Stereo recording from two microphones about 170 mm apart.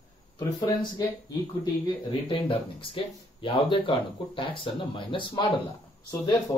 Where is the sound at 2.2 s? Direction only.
30° left (ahead or behind).